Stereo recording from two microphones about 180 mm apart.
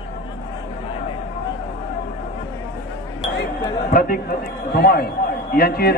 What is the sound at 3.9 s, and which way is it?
Speech, 50° left (ahead or behind).